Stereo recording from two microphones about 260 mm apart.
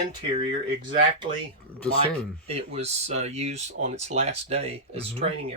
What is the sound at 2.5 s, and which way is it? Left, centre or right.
Speech, right.